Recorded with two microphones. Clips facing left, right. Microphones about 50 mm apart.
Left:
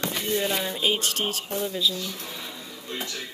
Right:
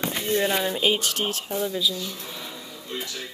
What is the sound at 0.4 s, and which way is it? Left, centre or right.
Speech, centre.